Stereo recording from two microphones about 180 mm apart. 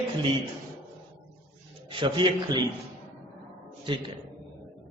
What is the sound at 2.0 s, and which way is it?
Speech, 25° right (ahead or behind).